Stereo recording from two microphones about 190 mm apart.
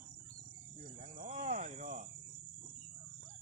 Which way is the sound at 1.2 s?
45° right (ahead or behind).